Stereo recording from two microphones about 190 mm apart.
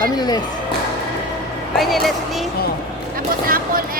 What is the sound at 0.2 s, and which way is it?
Speech, 20° left (ahead or behind).